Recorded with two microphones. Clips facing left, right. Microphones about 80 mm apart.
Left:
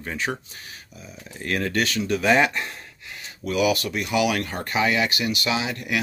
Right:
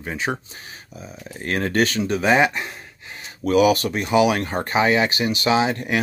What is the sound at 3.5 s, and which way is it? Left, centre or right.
Speech, right.